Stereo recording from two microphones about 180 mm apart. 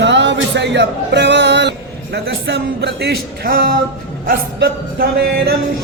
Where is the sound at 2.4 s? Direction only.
65° right (ahead or behind).